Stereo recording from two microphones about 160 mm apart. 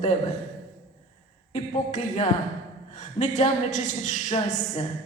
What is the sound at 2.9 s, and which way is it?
A woman's voice, 45° left (ahead or behind).